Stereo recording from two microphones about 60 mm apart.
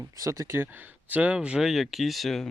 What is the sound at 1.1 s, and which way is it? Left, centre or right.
Speech, right.